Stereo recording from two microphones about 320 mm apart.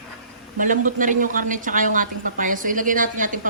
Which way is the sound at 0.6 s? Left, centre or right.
Right.